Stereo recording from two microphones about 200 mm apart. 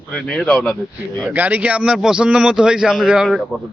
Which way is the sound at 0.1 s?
5° left (ahead or behind).